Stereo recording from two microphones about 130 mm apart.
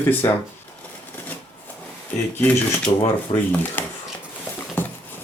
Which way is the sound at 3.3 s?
45° left (ahead or behind).